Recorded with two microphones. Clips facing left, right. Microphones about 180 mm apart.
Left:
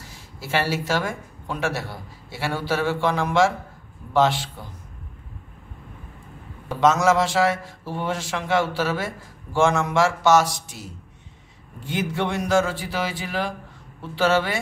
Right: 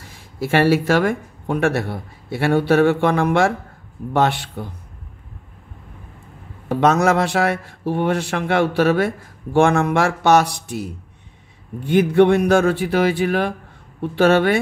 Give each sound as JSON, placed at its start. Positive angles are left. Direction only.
{"t": 0.0, "sound": "a man's voice", "side_deg": -55}
{"t": 6.7, "sound": "a man's voice", "side_deg": -60}